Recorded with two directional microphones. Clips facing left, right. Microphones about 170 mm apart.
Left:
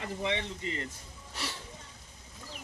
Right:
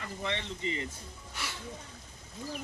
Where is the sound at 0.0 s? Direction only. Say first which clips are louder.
Left 3 dB; 15° left (ahead or behind).